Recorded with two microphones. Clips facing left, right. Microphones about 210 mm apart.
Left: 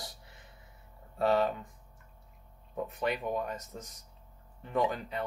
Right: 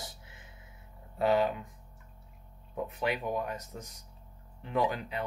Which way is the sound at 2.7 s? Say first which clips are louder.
Even; centre (ahead or behind).